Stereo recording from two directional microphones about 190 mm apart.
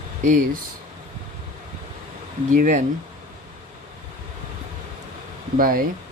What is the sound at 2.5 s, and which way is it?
Speech, 40° right (ahead or behind).